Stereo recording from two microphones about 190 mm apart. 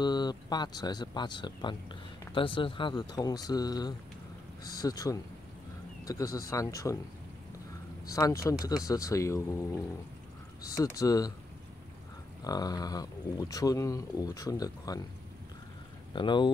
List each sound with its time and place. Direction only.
0.0 s speech: 20° left (ahead or behind)
8.1 s speech: 15° left (ahead or behind)
12.4 s speech: 20° left (ahead or behind)
16.1 s speech: 25° left (ahead or behind)